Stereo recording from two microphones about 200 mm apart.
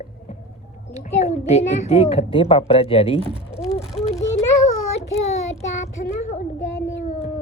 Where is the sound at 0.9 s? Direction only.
35° left (ahead or behind).